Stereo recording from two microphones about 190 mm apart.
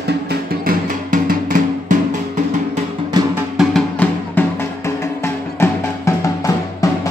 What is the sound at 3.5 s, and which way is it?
Music, 5° left (ahead or behind).